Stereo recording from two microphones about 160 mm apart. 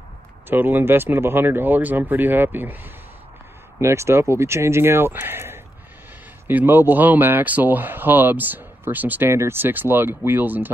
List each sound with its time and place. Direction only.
0.5 s speech: 15° right (ahead or behind)